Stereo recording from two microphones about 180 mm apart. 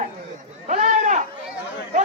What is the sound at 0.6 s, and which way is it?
Chatter, 45° right (ahead or behind).